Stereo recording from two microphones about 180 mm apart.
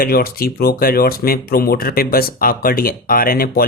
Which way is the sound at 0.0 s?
55° left (ahead or behind).